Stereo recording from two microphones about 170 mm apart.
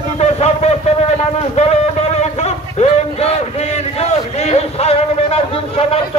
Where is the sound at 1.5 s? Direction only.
40° left (ahead or behind).